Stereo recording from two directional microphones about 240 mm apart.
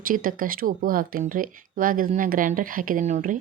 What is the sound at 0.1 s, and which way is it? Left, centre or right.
Speech, right.